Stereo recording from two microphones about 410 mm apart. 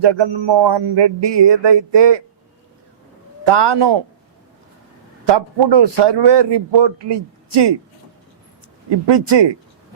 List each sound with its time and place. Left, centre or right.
0.0 s a man's voice: right
3.4 s a man's voice: right
5.2 s a man's voice: right
9.0 s a man's voice: right